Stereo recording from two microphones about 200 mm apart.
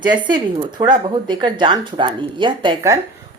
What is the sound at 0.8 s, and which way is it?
Speech, 20° right (ahead or behind).